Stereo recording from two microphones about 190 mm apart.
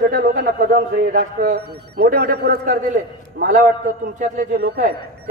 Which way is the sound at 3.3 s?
45° right (ahead or behind).